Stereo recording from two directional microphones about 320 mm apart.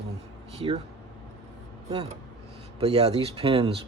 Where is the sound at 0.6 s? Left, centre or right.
Centre.